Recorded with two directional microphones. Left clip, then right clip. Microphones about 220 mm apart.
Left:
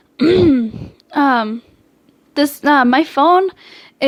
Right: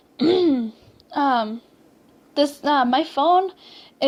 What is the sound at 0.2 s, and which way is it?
Throat clearing, 30° left (ahead or behind).